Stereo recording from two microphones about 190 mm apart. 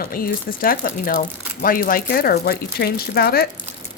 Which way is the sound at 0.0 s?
50° left (ahead or behind).